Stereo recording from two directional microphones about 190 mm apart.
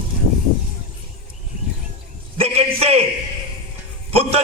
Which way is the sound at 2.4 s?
30° right (ahead or behind).